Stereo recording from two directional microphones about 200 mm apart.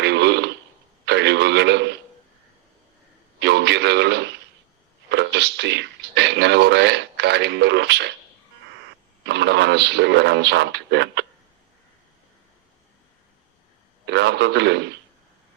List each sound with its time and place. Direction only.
0.0 s fart: 60° right (ahead or behind)
1.0 s radio: 60° right (ahead or behind)
3.4 s radio: 60° right (ahead or behind)
5.0 s speech: 60° right (ahead or behind)
9.2 s speech: 60° right (ahead or behind)
14.0 s radio: 60° right (ahead or behind)